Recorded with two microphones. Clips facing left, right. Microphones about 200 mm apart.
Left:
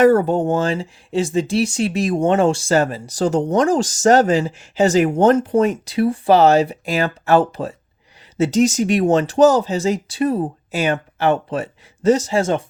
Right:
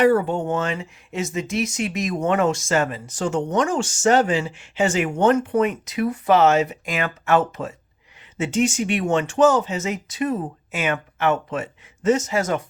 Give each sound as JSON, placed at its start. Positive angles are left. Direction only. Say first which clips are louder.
{"t": 0.0, "sound": "speech", "louder": "left 4 dB", "side_deg": 45}